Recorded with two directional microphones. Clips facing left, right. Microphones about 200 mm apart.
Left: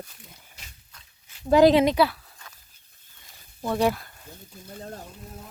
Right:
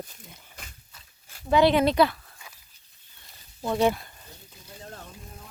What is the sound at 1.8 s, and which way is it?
Speech, 5° left (ahead or behind).